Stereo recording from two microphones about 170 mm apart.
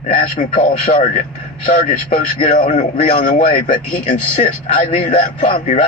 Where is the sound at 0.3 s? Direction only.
50° left (ahead or behind).